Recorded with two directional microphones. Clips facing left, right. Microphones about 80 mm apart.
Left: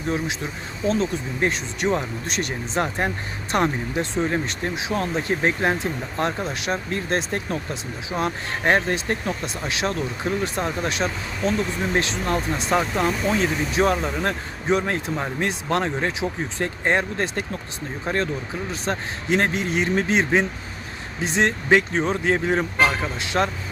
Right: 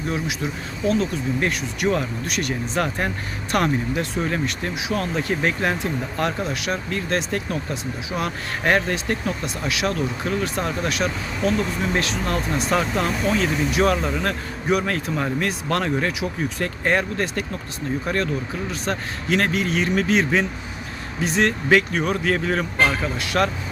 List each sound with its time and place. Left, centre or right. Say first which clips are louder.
0.9 s speech: right 1 dB; left
12.7 s speech: left 1 dB; centre
22.8 s speech: right 1 dB; centre
23.1 s speech: right 1 dB; left